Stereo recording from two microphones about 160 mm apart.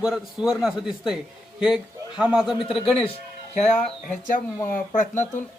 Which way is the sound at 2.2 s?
5° right (ahead or behind).